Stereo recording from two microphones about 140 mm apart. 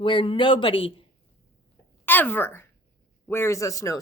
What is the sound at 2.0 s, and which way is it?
Speech, 15° left (ahead or behind).